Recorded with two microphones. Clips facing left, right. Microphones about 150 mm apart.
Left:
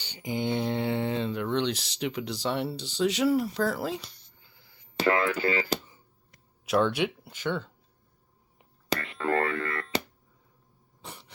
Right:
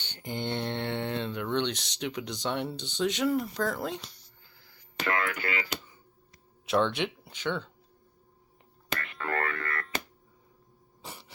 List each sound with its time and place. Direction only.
0.0 s speech: 5° left (ahead or behind)
4.4 s a sound: 20° left (ahead or behind)
4.9 s speech: 30° left (ahead or behind)
6.7 s speech: 5° left (ahead or behind)
8.9 s speech: 30° left (ahead or behind)
11.0 s a sound: centre (ahead or behind)